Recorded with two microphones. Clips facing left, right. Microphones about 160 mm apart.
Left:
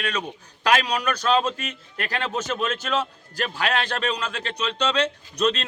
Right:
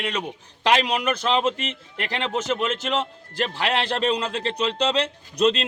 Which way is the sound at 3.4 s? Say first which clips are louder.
Right 1 dB; 25° right (ahead or behind).